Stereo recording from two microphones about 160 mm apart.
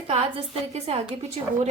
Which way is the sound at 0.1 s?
40° right (ahead or behind).